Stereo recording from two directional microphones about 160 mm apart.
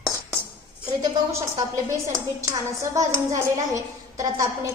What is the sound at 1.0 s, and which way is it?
A child's voice, 20° right (ahead or behind).